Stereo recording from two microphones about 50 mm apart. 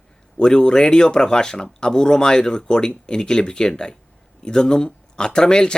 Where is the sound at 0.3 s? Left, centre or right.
Centre.